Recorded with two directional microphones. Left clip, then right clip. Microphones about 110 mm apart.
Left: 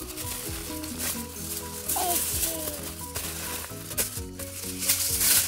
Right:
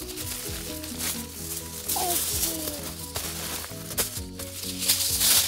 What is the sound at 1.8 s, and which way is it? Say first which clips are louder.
Music: right 1 dB; 5° left (ahead or behind).